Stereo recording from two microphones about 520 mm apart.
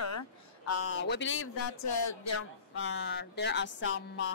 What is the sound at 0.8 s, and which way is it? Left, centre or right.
Music, left.